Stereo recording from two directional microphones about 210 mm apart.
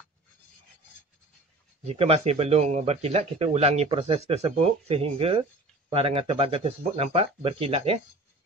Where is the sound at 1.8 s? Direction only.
30° right (ahead or behind).